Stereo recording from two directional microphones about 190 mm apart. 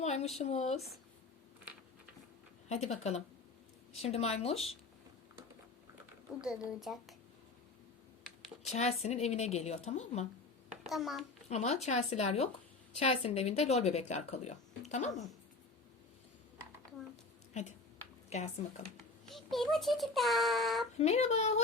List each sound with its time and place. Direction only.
0.0 s a sound: 35° left (ahead or behind)
0.3 s speech: 35° left (ahead or behind)
2.6 s speech: 35° left (ahead or behind)
6.4 s a child's voice: 5° right (ahead or behind)
8.4 s speech: 35° left (ahead or behind)
10.7 s a sound: centre (ahead or behind)
11.4 s speech: 35° left (ahead or behind)
15.1 s a child's voice: centre (ahead or behind)
17.5 s speech: 35° left (ahead or behind)
19.3 s a child's voice: centre (ahead or behind)
21.0 s speech: 35° left (ahead or behind)